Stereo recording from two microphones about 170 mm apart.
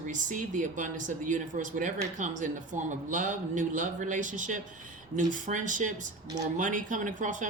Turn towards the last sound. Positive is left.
turn(degrees=-45)  # may be behind; listen again after turning